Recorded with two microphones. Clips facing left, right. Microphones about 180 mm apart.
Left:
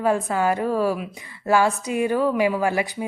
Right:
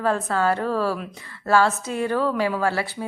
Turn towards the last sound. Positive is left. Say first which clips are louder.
# left 2 dB
turn(degrees=15)  # may be behind; listen again after turning